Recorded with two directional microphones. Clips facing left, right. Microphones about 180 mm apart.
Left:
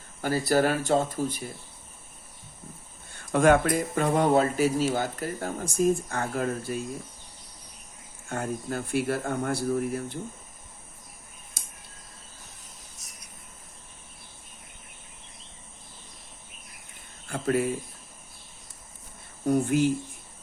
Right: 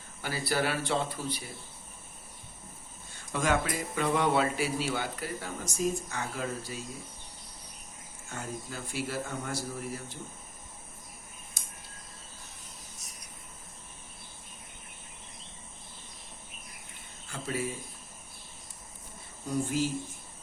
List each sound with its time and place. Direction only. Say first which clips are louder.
0.2 s speech: left 8 dB; 45° left (ahead or behind)
3.1 s speech: left 9 dB; 55° left (ahead or behind)
8.3 s speech: left 8 dB; 55° left (ahead or behind)
17.2 s a sound: left 9 dB; 55° left (ahead or behind)
19.5 s speech: left 7 dB; 60° left (ahead or behind)